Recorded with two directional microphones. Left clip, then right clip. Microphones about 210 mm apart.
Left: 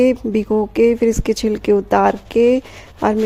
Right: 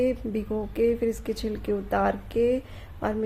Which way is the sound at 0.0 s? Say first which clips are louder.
Left 11 dB; 40° left (ahead or behind).